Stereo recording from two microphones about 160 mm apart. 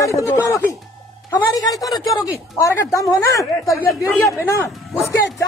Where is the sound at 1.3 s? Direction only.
25° left (ahead or behind).